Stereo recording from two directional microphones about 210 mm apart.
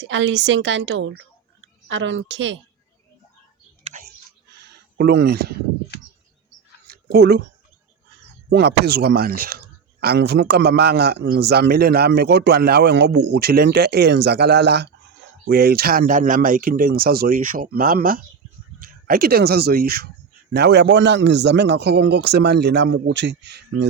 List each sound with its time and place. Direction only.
0.0 s a woman's voice: 60° right (ahead or behind)
4.9 s a man's voice: 50° right (ahead or behind)
6.9 s a sound: 50° right (ahead or behind)
8.4 s a man's voice: 50° right (ahead or behind)